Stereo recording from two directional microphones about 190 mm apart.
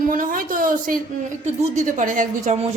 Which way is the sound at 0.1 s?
45° right (ahead or behind).